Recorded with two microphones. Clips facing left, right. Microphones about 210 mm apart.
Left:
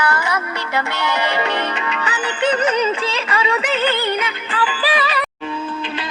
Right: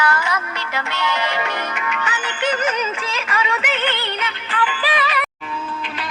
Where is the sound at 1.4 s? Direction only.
30° left (ahead or behind).